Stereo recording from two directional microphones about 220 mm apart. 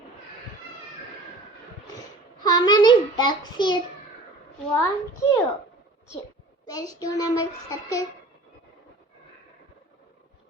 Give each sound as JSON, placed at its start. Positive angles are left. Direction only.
{"t": 2.4, "sound": "a child's voice", "side_deg": 20}
{"t": 4.7, "sound": "child singing", "side_deg": 15}
{"t": 6.7, "sound": "child singing", "side_deg": 15}